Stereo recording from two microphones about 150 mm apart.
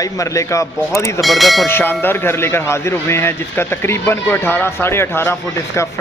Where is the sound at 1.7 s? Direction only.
15° left (ahead or behind).